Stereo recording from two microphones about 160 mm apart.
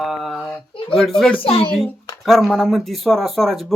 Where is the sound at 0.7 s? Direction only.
35° left (ahead or behind).